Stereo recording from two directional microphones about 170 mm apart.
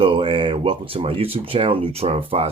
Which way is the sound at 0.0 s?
30° right (ahead or behind).